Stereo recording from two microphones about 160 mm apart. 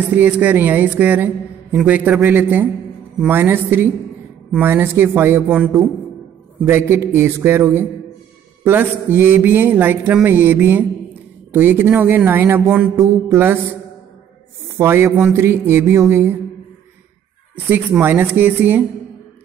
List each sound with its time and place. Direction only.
0.1 s a woman's voice: 10° right (ahead or behind)
6.9 s a woman's voice: 15° right (ahead or behind)
14.8 s a woman's voice: 15° right (ahead or behind)
17.6 s a woman's voice: 10° right (ahead or behind)